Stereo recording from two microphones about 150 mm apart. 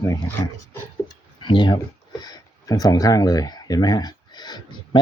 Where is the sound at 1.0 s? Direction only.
30° left (ahead or behind).